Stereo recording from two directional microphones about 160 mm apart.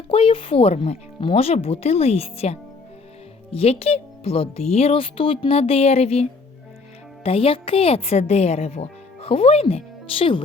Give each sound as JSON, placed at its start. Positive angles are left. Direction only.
{"t": 0.1, "sound": "speech", "side_deg": 35}
{"t": 7.3, "sound": "speech", "side_deg": 35}